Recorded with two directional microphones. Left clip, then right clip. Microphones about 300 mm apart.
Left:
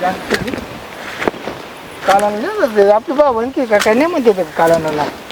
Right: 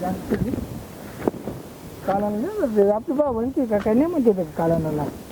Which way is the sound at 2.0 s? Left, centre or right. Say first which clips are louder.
Left 11 dB; centre.